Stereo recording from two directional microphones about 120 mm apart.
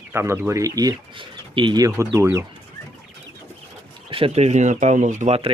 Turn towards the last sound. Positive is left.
turn(degrees=-90)